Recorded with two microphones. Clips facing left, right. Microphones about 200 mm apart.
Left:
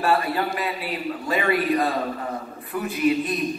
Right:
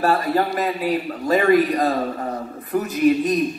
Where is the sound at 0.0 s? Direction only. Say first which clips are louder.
Right 3 dB; 40° right (ahead or behind).